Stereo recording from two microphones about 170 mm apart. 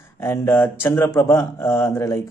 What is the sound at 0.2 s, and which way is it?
Speech, 15° left (ahead or behind).